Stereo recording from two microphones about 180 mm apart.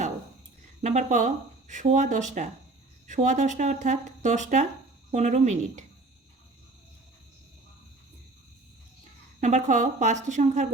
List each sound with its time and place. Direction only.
0.8 s speech: 40° right (ahead or behind)
9.4 s speech: 40° right (ahead or behind)